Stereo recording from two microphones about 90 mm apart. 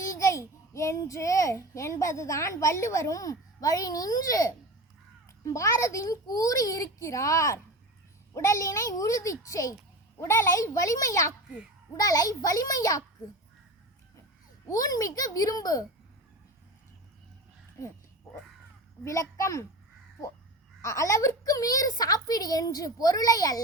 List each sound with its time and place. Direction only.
0.2 s a child's voice: 35° left (ahead or behind)
10.2 s a child's voice: 30° left (ahead or behind)
14.7 s a woman's voice: 40° left (ahead or behind)
17.8 s a child's voice: 35° left (ahead or behind)
19.0 s a child's voice: 35° left (ahead or behind)
20.8 s a woman's voice: 35° left (ahead or behind)